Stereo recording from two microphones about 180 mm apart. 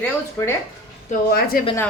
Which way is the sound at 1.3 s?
55° left (ahead or behind).